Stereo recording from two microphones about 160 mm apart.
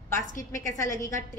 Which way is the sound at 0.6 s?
20° left (ahead or behind).